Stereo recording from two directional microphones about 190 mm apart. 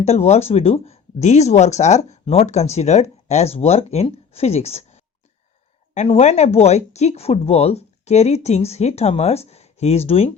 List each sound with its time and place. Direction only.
0.0 s speech: 35° left (ahead or behind)
5.9 s speech: 35° left (ahead or behind)